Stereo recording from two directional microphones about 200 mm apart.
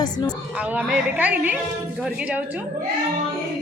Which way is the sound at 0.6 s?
5° right (ahead or behind).